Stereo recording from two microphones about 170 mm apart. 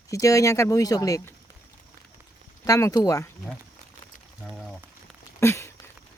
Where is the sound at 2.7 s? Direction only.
20° left (ahead or behind).